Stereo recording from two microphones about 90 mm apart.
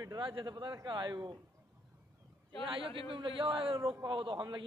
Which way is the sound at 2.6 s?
75° right (ahead or behind).